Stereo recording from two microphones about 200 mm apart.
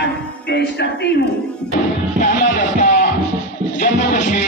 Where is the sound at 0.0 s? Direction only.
55° left (ahead or behind).